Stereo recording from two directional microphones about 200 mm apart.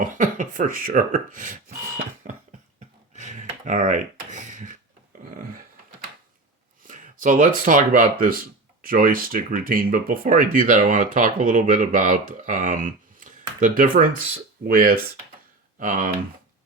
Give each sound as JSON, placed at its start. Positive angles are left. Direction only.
{"t": 0.0, "sound": "speech", "side_deg": -40}
{"t": 3.1, "sound": "a sound", "side_deg": -35}
{"t": 6.8, "sound": "speech", "side_deg": -40}